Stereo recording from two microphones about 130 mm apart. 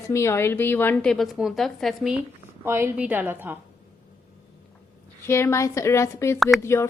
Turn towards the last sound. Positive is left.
turn(degrees=20)  # may be behind; listen again after turning